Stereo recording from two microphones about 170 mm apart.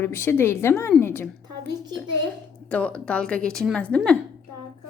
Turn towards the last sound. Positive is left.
turn(degrees=5)  # may be behind; listen again after turning